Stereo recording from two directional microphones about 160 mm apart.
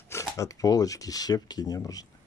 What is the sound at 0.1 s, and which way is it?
Speech, 20° left (ahead or behind).